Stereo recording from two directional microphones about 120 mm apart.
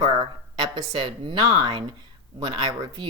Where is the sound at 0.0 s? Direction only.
40° right (ahead or behind).